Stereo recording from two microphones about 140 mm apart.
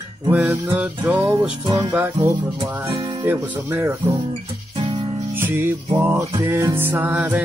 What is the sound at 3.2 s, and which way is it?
Music, 15° right (ahead or behind).